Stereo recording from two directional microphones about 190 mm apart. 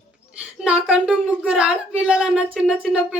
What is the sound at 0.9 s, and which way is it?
A woman's voice, 5° right (ahead or behind).